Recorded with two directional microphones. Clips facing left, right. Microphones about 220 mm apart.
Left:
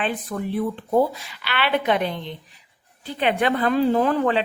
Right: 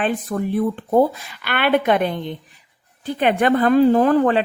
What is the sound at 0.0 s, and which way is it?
A woman's voice, 45° right (ahead or behind).